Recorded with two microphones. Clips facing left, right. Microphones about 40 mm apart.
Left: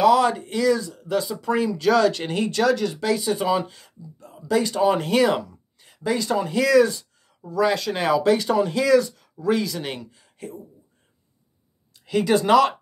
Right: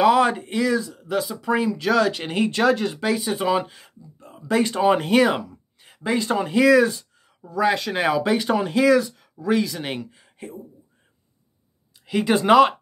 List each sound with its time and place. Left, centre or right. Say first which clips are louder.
0.0 s speech: even; right
5.0 s a sound: right 1 dB; centre
6.0 s speech: even; right
12.1 s speech: right 1 dB; centre